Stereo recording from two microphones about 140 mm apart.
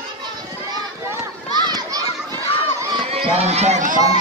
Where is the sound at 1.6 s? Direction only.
30° right (ahead or behind).